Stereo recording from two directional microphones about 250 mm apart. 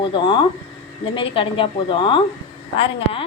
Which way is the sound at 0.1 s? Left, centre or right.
Centre.